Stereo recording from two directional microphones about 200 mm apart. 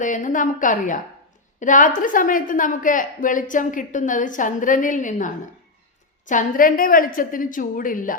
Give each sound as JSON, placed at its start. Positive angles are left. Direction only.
{"t": 0.0, "sound": "a woman's voice", "side_deg": 40}